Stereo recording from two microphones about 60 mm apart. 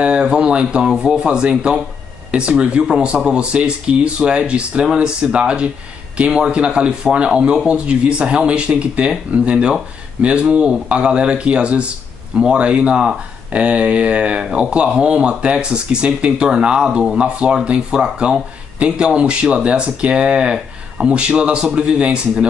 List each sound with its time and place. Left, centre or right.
0.0 s speech: centre